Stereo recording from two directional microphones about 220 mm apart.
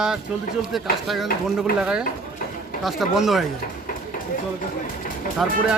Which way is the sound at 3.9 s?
40° left (ahead or behind).